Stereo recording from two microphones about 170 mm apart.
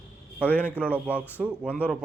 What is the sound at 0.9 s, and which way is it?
Speech, 10° right (ahead or behind).